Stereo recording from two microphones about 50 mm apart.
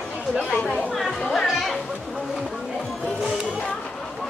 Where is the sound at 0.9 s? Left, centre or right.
Centre.